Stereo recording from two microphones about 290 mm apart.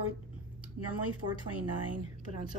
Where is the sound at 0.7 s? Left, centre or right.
Right.